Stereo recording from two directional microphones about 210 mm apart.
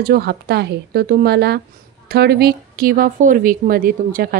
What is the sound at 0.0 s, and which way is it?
A woman's voice, 50° right (ahead or behind).